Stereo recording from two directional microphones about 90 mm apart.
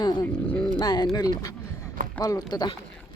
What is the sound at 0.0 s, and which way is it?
Speech, 50° left (ahead or behind).